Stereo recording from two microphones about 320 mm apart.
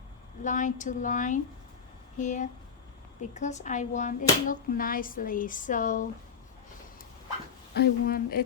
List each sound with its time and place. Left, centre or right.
0.4 s speech: left
7.7 s speech: left